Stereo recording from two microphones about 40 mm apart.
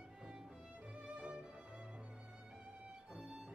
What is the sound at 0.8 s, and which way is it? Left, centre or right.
Music, right.